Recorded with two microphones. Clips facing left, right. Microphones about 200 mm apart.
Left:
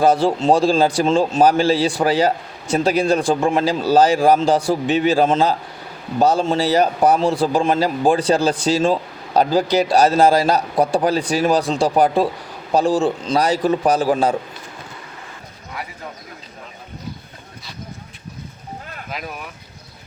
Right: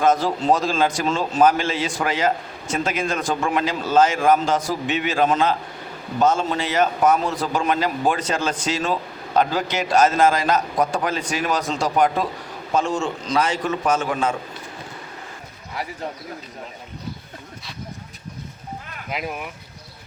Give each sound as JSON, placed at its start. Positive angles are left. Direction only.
{"t": 0.0, "sound": "a man's voice", "side_deg": 30}